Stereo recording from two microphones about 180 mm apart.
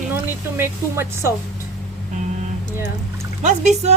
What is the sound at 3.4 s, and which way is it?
Speech, 40° right (ahead or behind).